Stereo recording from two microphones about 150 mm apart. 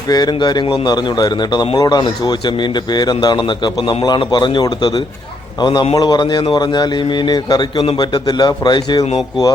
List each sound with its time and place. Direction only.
0.1 s a man's voice: 30° left (ahead or behind)